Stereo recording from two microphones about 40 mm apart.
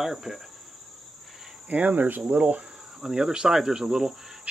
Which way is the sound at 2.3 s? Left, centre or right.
Right.